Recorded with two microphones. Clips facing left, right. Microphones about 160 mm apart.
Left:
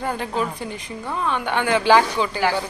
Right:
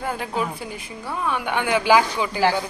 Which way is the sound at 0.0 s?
5° right (ahead or behind).